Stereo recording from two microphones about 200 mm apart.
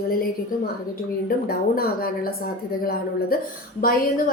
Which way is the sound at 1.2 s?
50° left (ahead or behind).